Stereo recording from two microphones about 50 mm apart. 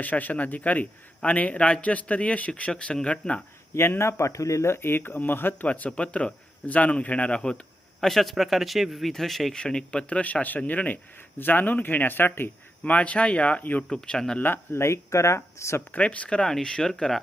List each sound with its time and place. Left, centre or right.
0.0 s a man's voice: left
3.8 s speech: left
5.5 s a man's voice: left
8.0 s a man's voice: centre
9.6 s a man's voice: centre; by 12.5 s left
12.8 s a man's voice: left
13.8 s speech: centre
14.3 s speech: left
16.0 s a man's voice: left
16.4 s speech: centre